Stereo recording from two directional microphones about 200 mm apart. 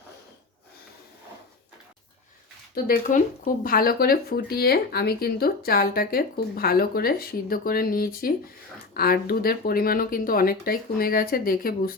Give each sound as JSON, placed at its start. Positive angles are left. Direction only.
{"t": 2.7, "sound": "speech", "side_deg": 45}